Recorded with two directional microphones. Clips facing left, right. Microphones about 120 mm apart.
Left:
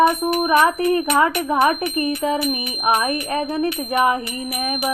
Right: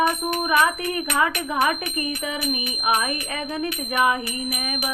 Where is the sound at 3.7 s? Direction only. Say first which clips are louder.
Left 6 dB; 20° left (ahead or behind).